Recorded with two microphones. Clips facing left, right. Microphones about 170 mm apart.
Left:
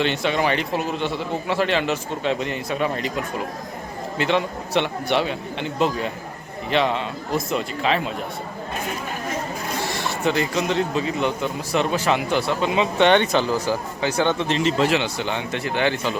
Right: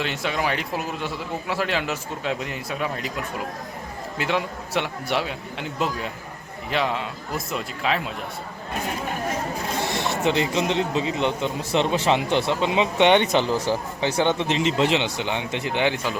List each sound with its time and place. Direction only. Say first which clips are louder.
0.0 s a man's voice: left 4 dB; 5° right (ahead or behind)
4.2 s a man's voice: left 4 dB; 5° right (ahead or behind)
9.8 s speech: even; 20° right (ahead or behind)